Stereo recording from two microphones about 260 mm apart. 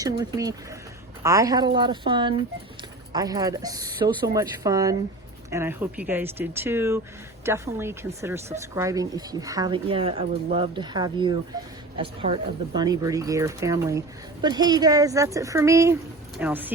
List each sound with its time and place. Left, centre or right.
0.0 s speech: centre